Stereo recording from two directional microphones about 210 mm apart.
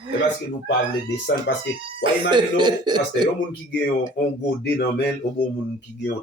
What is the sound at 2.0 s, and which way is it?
Speech, 20° right (ahead or behind).